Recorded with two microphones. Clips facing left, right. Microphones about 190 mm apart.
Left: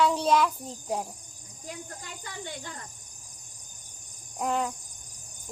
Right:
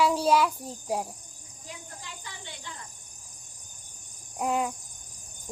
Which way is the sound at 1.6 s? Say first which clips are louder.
Left 4 dB; 50° left (ahead or behind).